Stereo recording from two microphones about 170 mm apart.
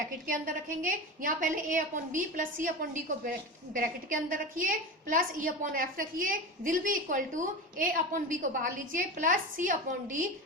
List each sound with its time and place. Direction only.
0.3 s a woman's voice: 50° right (ahead or behind)